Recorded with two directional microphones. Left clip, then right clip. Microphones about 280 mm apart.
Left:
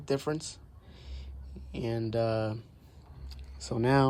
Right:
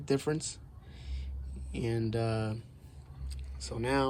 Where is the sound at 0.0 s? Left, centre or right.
Centre.